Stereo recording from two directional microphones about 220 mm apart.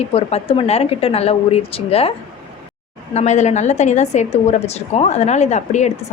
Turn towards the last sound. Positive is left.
turn(degrees=30)  # may be behind; listen again after turning